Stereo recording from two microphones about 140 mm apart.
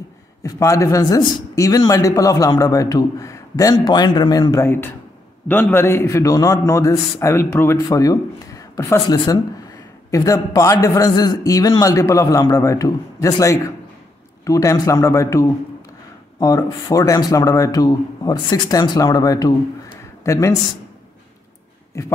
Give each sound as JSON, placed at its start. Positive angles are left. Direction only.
{"t": 0.4, "sound": "a man's voice", "side_deg": 20}
{"t": 21.9, "sound": "a man's voice", "side_deg": 20}